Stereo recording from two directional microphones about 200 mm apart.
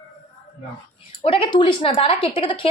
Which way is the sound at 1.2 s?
25° left (ahead or behind).